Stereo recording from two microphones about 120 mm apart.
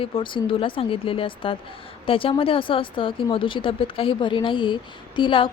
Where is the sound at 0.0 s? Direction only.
45° left (ahead or behind).